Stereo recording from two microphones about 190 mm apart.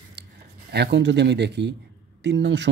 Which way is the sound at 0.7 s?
60° right (ahead or behind).